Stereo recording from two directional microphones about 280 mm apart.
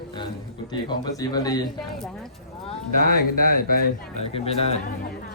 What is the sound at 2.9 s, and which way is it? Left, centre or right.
Speech, left.